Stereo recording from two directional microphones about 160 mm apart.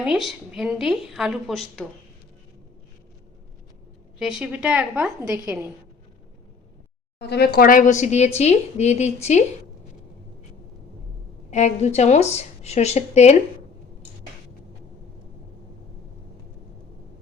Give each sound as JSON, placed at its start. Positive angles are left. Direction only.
{"t": 0.0, "sound": "a woman's voice", "side_deg": -5}
{"t": 4.2, "sound": "a woman's voice", "side_deg": -5}
{"t": 7.2, "sound": "a woman's voice", "side_deg": 85}
{"t": 11.5, "sound": "a woman's voice", "side_deg": 45}